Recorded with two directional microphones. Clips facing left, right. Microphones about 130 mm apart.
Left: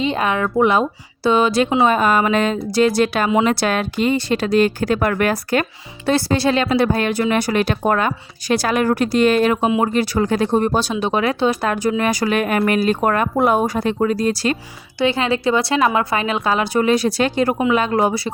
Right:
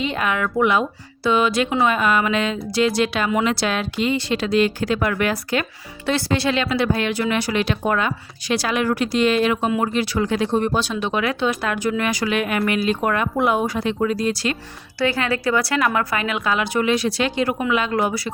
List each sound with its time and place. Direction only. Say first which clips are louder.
0.0 s speech: left 3 dB; 30° left (ahead or behind); by 5.6 s 45° left (ahead or behind)
6.1 s speech: left 4 dB; 35° left (ahead or behind)
14.9 s a woman's voice: left 3 dB; 20° left (ahead or behind); by 18.0 s 40° left (ahead or behind)
18.0 s a woman's voice: left 4 dB; 30° left (ahead or behind)